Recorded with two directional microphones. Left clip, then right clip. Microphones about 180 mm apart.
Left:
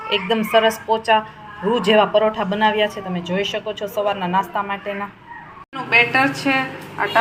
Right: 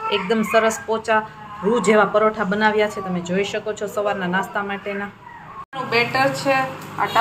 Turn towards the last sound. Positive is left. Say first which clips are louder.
# even
turn(degrees=15)  # may be behind; listen again after turning